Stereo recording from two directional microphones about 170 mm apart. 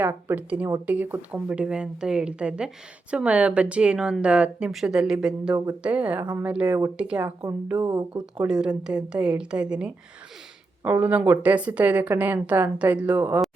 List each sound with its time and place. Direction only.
0.0 s speech: 10° right (ahead or behind)
7.8 s speech: 20° right (ahead or behind)
8.1 s a woman's voice: 5° right (ahead or behind)